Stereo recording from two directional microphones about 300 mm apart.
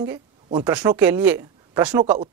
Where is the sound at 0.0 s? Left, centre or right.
Centre.